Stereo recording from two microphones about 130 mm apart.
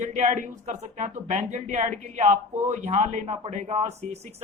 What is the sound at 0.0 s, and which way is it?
A man's voice, 70° right (ahead or behind).